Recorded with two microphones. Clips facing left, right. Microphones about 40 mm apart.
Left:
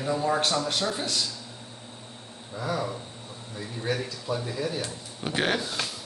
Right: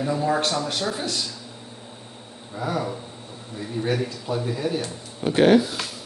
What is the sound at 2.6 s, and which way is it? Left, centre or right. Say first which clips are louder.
Speech: right 3 dB; centre.